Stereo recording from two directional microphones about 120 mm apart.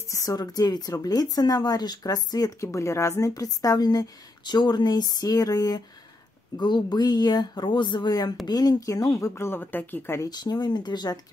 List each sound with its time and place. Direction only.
0.1 s speech: 30° left (ahead or behind)
10.3 s speech: 35° left (ahead or behind)